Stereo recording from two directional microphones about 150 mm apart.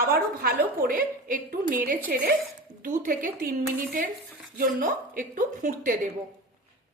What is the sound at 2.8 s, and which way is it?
Speech, 65° right (ahead or behind).